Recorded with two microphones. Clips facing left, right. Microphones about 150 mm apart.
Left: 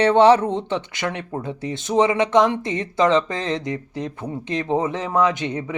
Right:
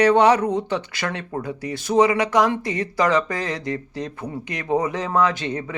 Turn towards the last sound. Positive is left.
turn(degrees=20)  # may be behind; listen again after turning